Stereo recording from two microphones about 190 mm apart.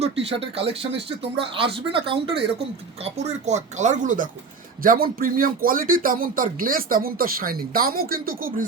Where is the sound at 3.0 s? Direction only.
35° right (ahead or behind).